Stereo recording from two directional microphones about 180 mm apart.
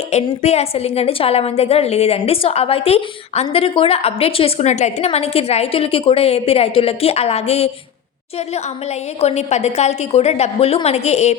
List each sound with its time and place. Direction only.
0.1 s a woman's voice: 35° left (ahead or behind)
9.2 s a woman's voice: 35° left (ahead or behind)